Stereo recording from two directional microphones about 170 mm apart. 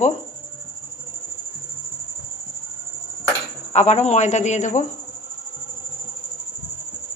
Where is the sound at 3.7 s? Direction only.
40° left (ahead or behind).